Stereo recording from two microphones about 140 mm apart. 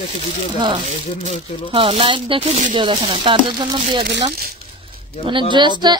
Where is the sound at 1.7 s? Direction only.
40° right (ahead or behind).